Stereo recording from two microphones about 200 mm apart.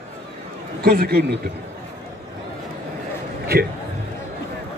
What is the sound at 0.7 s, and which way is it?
Speech, 50° right (ahead or behind).